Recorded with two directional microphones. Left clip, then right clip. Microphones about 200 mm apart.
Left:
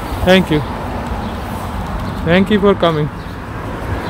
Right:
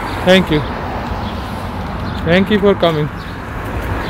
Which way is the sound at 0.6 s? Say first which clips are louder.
Right 1 dB; 55° left (ahead or behind).